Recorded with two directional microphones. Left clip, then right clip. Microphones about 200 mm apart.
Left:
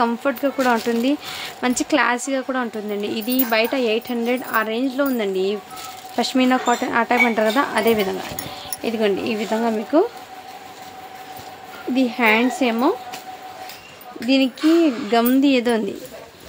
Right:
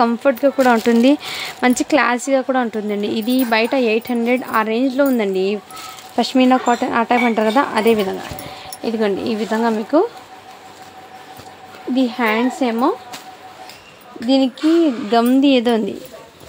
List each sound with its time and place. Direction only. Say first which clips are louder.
0.0 s speech: right 5 dB; 25° right (ahead or behind)
0.7 s speech: right 6 dB; 40° right (ahead or behind); by 10.0 s 20° right (ahead or behind)
11.9 s a woman's voice: even; 10° right (ahead or behind)
15.0 s speech: right 3 dB; 15° right (ahead or behind)